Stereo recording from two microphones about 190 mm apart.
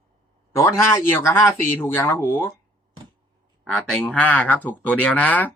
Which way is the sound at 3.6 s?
5° left (ahead or behind).